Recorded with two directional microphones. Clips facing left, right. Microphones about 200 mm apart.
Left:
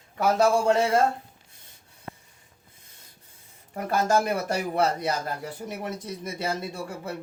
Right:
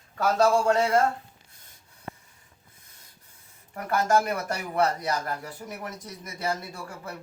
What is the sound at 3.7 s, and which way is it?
Speech, 25° left (ahead or behind).